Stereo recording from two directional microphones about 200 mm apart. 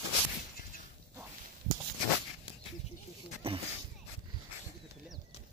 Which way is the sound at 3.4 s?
30° right (ahead or behind).